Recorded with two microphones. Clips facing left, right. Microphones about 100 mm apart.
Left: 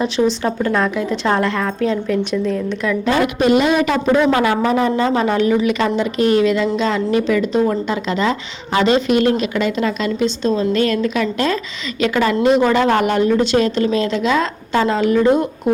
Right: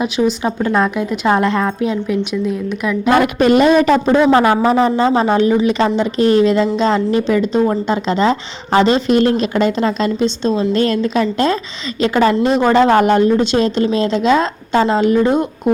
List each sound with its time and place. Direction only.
0.0 s a woman's voice: 15° right (ahead or behind)
3.1 s a woman's voice: 50° right (ahead or behind); by 15.7 s 20° right (ahead or behind)